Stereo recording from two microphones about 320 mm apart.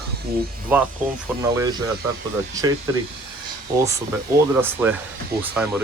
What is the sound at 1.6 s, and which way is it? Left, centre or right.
Speech, centre.